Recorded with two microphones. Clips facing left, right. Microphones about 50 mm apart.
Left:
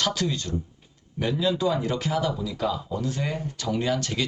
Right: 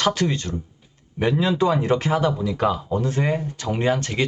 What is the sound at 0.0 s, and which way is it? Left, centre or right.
Speech, right.